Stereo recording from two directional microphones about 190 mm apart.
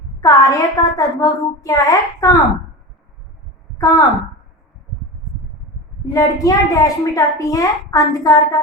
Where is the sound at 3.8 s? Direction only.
20° left (ahead or behind).